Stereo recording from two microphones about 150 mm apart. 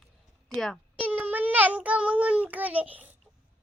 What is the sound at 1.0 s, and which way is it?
A child's voice, 10° right (ahead or behind).